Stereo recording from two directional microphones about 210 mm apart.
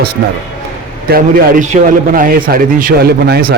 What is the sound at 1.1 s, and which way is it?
A man's voice, 45° right (ahead or behind).